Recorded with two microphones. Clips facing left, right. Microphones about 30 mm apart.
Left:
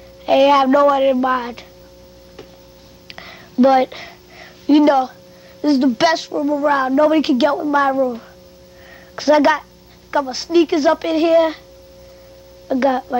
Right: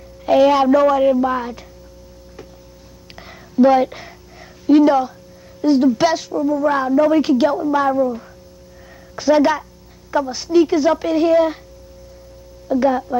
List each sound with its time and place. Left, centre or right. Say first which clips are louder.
0.2 s a woman's voice: left 1 dB; left
3.1 s a sound: left 3 dB; left
5.6 s a woman's voice: even; left
7.9 s speech: even; centre
9.1 s a woman's voice: left 1 dB; left
12.6 s a woman's voice: even; left